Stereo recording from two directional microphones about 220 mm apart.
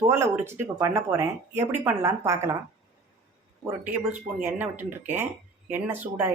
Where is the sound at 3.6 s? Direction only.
10° right (ahead or behind).